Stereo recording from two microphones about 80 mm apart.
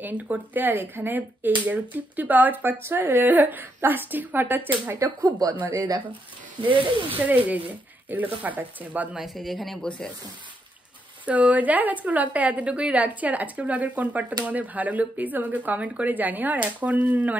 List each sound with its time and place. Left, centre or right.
0.0 s speech: right
4.9 s speech: right
6.7 s speech: right
7.2 s speech: right
9.1 s speech: centre
9.8 s speech: centre
11.2 s speech: centre